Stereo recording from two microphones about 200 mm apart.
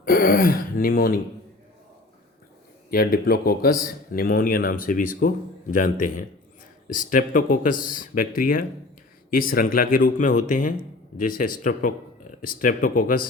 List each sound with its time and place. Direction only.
0.0 s speech: 45° left (ahead or behind)
2.9 s speech: 50° left (ahead or behind)